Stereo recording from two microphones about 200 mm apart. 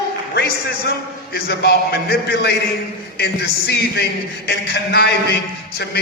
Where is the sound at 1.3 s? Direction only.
50° left (ahead or behind).